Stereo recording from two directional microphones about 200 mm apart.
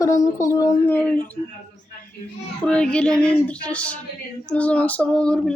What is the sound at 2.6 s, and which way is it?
A woman's voice, 5° left (ahead or behind).